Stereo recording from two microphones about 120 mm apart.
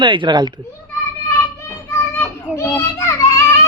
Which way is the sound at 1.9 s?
20° left (ahead or behind).